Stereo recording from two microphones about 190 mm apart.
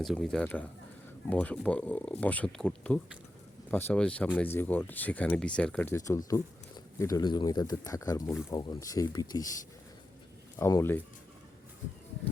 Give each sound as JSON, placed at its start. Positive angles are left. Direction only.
{"t": 0.0, "sound": "speech", "side_deg": 0}
{"t": 10.6, "sound": "speech", "side_deg": 15}